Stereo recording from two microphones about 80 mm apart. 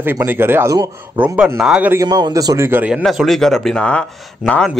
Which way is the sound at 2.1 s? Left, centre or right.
Right.